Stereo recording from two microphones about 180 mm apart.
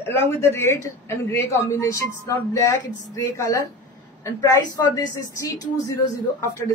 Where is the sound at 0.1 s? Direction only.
10° left (ahead or behind).